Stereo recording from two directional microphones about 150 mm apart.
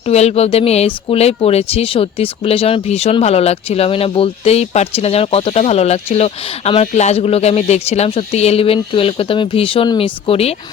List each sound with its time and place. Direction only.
0.1 s speech: 45° left (ahead or behind)